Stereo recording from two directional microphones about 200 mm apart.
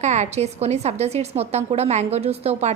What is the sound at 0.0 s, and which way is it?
A woman's voice, 35° right (ahead or behind).